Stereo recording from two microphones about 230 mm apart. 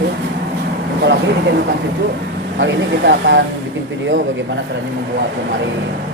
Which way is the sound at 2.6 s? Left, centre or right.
Right.